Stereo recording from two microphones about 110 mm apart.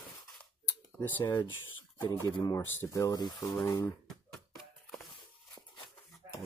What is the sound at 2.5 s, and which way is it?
Speech, 25° left (ahead or behind).